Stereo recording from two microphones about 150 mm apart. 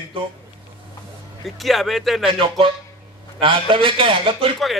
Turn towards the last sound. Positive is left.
turn(degrees=-35)  # may be behind; listen again after turning